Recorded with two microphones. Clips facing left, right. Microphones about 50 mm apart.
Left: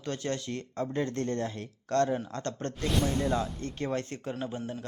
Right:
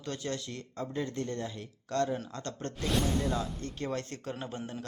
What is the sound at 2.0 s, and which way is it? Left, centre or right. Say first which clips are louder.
Speech: left 3 dB; centre.